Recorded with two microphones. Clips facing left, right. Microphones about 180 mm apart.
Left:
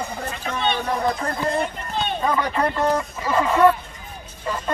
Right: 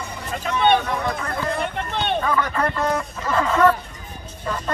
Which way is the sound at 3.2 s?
10° left (ahead or behind).